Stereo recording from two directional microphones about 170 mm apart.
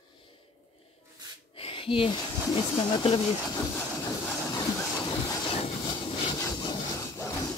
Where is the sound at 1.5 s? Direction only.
30° left (ahead or behind).